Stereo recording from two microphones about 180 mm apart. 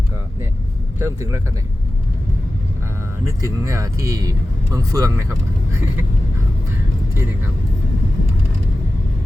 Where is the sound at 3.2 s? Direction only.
15° right (ahead or behind).